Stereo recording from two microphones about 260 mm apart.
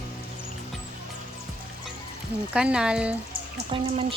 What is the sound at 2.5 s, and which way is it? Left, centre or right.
Speech, centre.